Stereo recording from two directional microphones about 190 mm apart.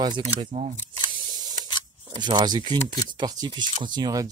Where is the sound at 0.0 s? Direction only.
25° right (ahead or behind).